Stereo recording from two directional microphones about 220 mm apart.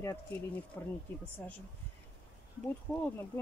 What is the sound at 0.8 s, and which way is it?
Speech, 10° left (ahead or behind).